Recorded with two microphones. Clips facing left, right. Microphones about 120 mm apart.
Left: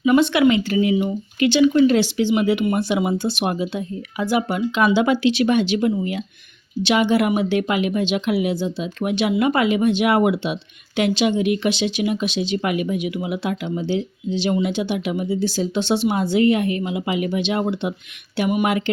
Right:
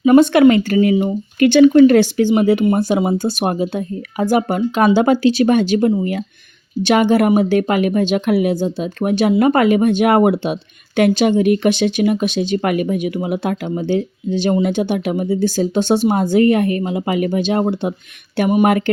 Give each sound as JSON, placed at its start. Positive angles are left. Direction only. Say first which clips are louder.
{"t": 0.0, "sound": "speech", "louder": "right 6 dB", "side_deg": -45}